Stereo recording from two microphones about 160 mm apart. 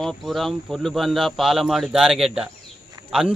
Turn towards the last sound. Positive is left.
turn(degrees=-5)  # may be behind; listen again after turning